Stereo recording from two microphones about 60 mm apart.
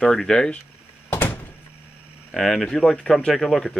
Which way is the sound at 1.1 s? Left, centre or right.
Left.